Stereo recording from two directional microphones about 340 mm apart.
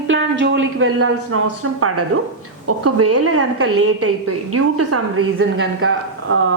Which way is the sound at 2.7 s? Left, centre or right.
Right.